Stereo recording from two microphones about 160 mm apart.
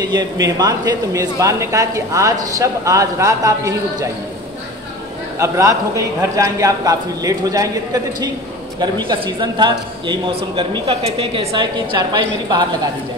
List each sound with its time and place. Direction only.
0.0 s a man's voice: 25° right (ahead or behind)
5.4 s a man's voice: 20° right (ahead or behind)